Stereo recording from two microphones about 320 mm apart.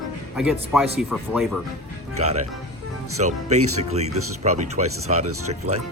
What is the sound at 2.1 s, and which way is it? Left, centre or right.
Speech, right.